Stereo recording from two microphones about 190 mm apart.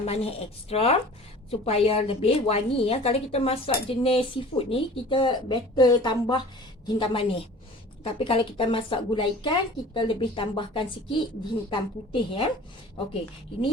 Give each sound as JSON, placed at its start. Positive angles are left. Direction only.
{"t": 0.0, "sound": "a woman's voice", "side_deg": 30}